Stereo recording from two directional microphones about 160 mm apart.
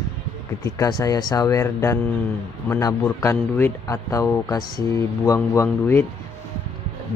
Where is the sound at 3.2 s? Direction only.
15° left (ahead or behind).